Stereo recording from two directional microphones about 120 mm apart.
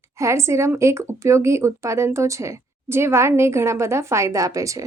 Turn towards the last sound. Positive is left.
turn(degrees=-25)  # may be behind; listen again after turning